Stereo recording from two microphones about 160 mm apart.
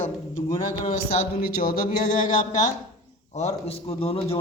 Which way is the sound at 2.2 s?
55° left (ahead or behind).